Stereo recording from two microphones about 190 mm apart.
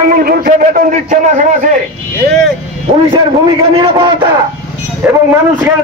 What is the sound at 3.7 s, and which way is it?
Speech, 25° right (ahead or behind).